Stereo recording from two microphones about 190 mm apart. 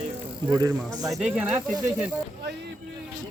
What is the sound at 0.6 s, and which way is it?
Speech, 20° right (ahead or behind).